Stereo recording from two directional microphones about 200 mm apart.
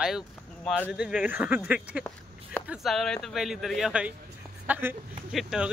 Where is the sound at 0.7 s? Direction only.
10° left (ahead or behind).